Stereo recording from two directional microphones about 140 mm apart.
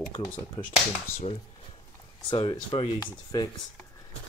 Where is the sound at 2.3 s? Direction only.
40° left (ahead or behind).